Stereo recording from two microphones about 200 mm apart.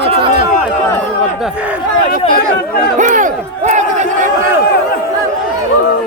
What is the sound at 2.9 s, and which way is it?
Battle cry, 40° right (ahead or behind).